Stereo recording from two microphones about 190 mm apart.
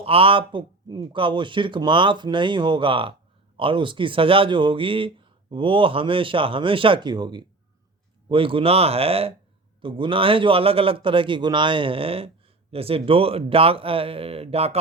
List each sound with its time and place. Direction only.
0.0 s a man's voice: 30° right (ahead or behind)